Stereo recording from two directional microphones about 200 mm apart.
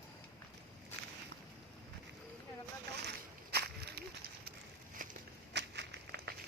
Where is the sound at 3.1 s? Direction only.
55° right (ahead or behind).